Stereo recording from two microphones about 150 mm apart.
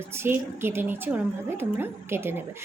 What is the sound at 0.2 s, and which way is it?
Speech, 15° right (ahead or behind).